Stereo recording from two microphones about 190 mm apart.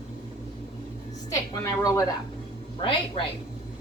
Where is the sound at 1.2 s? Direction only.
15° left (ahead or behind).